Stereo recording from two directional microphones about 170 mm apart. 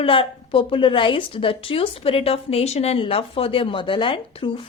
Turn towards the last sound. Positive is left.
turn(degrees=30)  # may be behind; listen again after turning